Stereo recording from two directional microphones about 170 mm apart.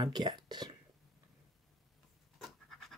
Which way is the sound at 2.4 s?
Centre (ahead or behind).